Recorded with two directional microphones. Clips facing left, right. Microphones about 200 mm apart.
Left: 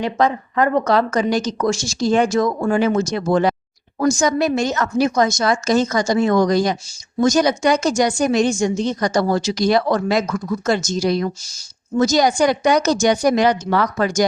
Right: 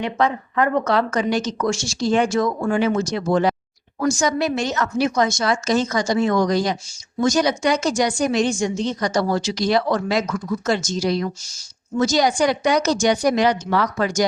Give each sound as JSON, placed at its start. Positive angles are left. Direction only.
{"t": 0.0, "sound": "a woman's voice", "side_deg": 35}